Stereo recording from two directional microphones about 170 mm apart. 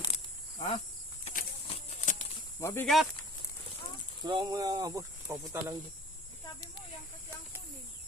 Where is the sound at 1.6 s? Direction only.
40° left (ahead or behind).